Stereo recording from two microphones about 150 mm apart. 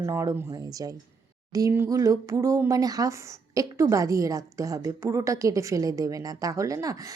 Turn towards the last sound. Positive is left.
turn(degrees=-20)  # may be behind; listen again after turning